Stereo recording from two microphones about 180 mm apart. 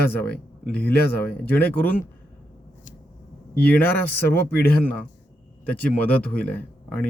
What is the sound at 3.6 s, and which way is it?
Speech, 10° left (ahead or behind).